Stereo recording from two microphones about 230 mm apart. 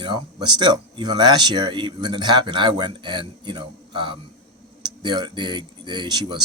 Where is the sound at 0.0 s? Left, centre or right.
Centre.